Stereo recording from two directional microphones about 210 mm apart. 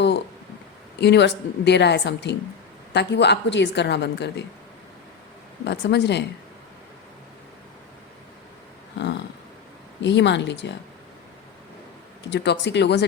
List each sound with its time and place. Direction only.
0.9 s a woman's voice: 55° left (ahead or behind)
5.6 s a woman's voice: 55° left (ahead or behind)
9.0 s a sound: 55° left (ahead or behind)
10.0 s a woman's voice: 55° left (ahead or behind)
12.3 s a woman's voice: 55° left (ahead or behind)